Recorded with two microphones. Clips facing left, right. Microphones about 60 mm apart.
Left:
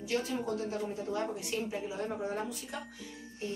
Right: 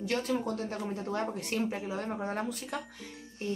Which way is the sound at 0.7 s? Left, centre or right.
Right.